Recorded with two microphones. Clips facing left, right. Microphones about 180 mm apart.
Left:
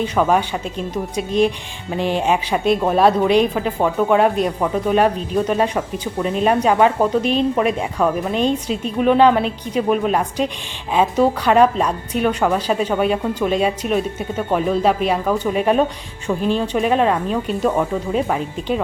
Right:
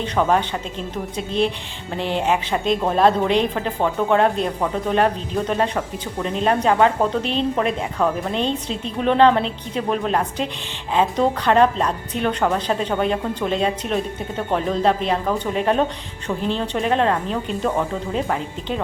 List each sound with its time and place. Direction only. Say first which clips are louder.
0.0 s speech: left 2 dB; 10° left (ahead or behind)